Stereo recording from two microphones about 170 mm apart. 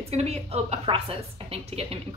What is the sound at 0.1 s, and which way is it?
A woman's voice, 40° right (ahead or behind).